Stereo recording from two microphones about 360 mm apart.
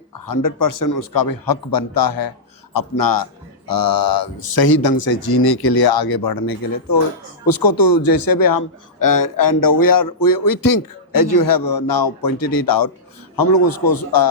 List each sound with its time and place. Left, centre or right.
0.3 s a man's voice: left